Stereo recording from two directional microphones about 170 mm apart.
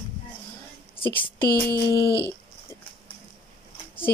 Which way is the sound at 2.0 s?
80° left.